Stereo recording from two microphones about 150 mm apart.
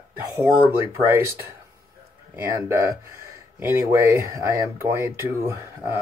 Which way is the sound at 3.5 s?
15° right (ahead or behind).